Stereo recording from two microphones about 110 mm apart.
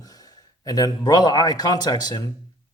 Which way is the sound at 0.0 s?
35° left (ahead or behind).